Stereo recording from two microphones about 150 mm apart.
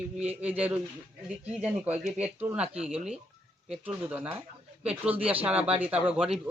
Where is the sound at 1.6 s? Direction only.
10° right (ahead or behind).